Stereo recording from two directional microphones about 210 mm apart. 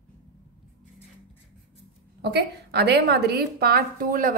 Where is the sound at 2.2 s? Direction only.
50° right (ahead or behind).